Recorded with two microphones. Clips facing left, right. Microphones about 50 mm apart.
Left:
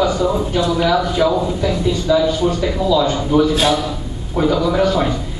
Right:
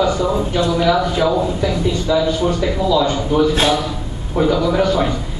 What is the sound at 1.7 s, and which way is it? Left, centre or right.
Speech, centre.